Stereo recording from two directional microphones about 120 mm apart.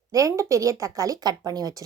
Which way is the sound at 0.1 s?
25° right (ahead or behind).